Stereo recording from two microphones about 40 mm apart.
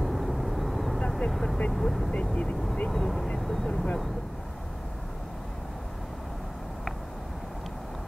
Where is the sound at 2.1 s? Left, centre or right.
Left.